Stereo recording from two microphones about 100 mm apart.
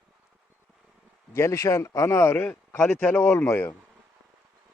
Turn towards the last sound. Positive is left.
turn(degrees=20)  # may be behind; listen again after turning